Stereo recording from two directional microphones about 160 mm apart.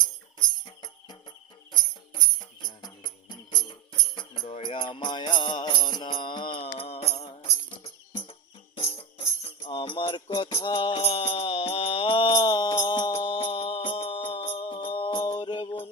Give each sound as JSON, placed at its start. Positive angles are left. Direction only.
{"t": 0.3, "sound": "jingle bell", "side_deg": 30}
{"t": 2.6, "sound": "music", "side_deg": 30}